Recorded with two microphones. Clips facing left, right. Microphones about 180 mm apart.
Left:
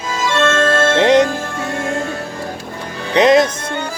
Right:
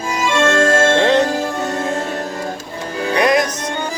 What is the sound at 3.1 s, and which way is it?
Music, 25° left (ahead or behind).